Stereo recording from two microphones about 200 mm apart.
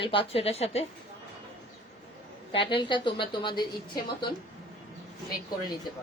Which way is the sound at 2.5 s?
25° left (ahead or behind).